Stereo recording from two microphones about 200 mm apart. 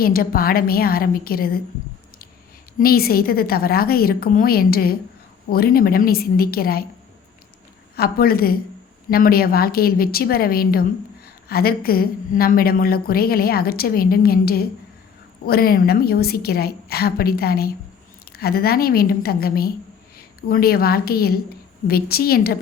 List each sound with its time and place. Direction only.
0.0 s a woman's voice: 45° left (ahead or behind)
2.7 s a woman's voice: 50° left (ahead or behind)
7.9 s a woman's voice: 50° left (ahead or behind)